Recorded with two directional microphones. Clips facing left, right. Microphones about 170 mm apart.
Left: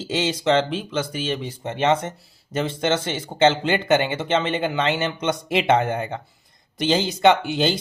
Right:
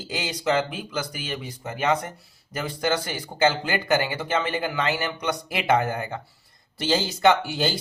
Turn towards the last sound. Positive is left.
turn(degrees=20)  # may be behind; listen again after turning